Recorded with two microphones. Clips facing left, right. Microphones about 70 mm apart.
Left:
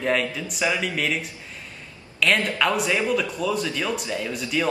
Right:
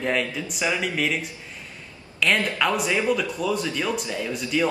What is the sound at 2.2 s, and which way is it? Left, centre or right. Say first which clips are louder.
Speech: left 1 dB; centre.